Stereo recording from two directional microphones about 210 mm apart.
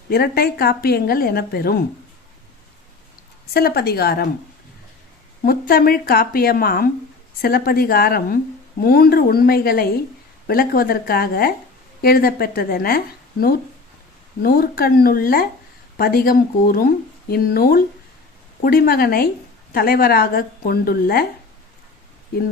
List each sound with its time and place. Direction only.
0.1 s speech: 45° left (ahead or behind)
3.5 s speech: 50° left (ahead or behind)
5.4 s speech: 45° left (ahead or behind)
14.4 s speech: 45° left (ahead or behind)
22.3 s speech: 45° left (ahead or behind)